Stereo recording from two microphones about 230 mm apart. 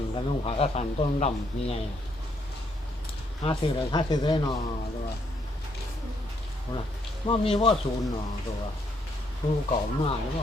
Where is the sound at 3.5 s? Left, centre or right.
Centre.